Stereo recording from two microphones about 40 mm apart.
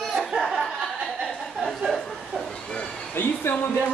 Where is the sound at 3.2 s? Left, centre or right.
Left.